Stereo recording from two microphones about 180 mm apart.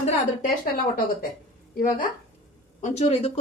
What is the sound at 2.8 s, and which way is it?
Speech, 35° left (ahead or behind).